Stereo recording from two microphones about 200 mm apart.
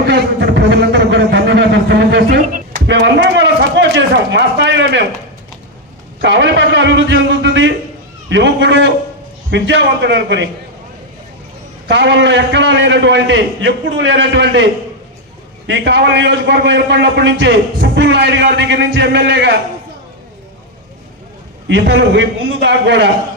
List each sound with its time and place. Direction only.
0.0 s a sound: 60° right (ahead or behind)
6.2 s a man's voice: 60° right (ahead or behind)
11.9 s a man's voice: 60° right (ahead or behind)
21.7 s a man's voice: 60° right (ahead or behind)